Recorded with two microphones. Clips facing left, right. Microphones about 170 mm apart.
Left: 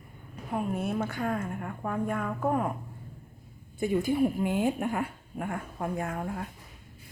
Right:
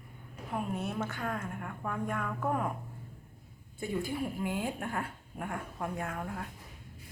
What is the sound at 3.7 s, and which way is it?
A woman's voice, 20° left (ahead or behind).